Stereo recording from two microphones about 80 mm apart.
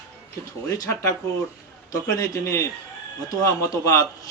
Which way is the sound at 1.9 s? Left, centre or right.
Left.